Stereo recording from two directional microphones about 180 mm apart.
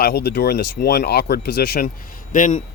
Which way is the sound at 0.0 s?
60° left (ahead or behind).